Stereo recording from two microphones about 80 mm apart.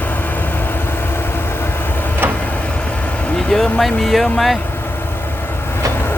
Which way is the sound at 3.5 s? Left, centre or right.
Centre.